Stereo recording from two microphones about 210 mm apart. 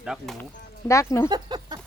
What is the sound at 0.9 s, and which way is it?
Speech, 15° left (ahead or behind).